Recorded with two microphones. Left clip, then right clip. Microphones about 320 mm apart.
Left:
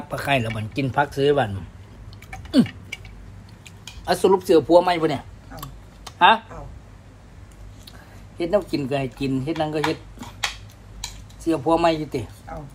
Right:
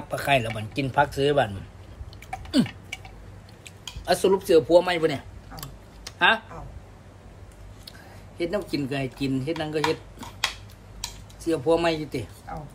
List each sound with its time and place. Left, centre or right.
0.1 s speech: centre
3.6 s a sound: centre
8.4 s speech: centre
11.4 s speech: centre